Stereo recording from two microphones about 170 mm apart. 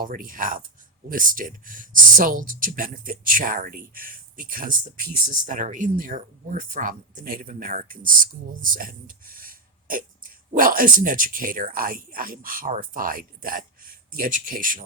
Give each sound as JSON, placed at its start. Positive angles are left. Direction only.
{"t": 0.0, "sound": "speech", "side_deg": -55}